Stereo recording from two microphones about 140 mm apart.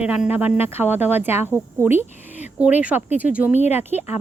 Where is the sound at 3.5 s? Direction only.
55° left (ahead or behind).